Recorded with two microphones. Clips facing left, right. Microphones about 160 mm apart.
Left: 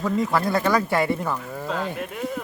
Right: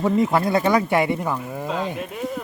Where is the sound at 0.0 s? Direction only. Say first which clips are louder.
Right 3 dB; 25° right (ahead or behind).